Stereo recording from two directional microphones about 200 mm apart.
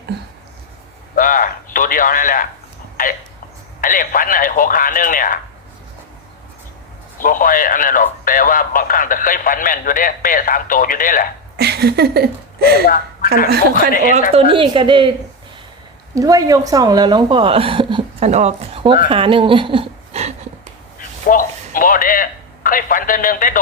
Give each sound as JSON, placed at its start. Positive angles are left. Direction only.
{"t": 1.1, "sound": "a sound", "side_deg": 45}
{"t": 3.8, "sound": "speech", "side_deg": 45}
{"t": 7.2, "sound": "speech", "side_deg": 45}
{"t": 11.5, "sound": "a woman's voice", "side_deg": -55}
{"t": 14.3, "sound": "a woman's voice", "side_deg": -25}
{"t": 16.1, "sound": "a woman's voice", "side_deg": -15}
{"t": 21.2, "sound": "a man's voice", "side_deg": 45}